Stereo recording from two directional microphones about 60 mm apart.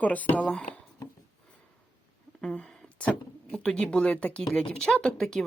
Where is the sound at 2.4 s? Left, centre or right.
Centre.